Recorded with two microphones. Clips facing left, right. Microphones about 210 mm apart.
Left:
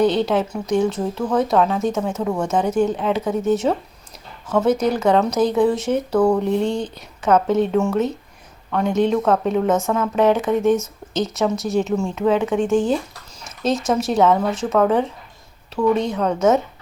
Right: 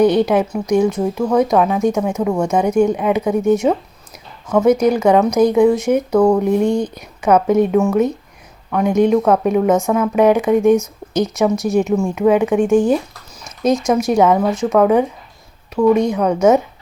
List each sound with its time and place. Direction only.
0.0 s speech: 15° right (ahead or behind)
13.9 s speech: 15° right (ahead or behind)